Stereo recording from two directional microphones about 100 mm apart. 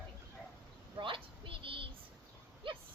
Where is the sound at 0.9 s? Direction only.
60° right (ahead or behind).